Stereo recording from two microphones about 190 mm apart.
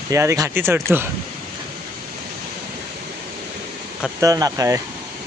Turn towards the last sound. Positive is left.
turn(degrees=-15)  # may be behind; listen again after turning